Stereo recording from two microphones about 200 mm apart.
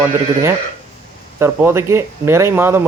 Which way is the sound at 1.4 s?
10° right (ahead or behind).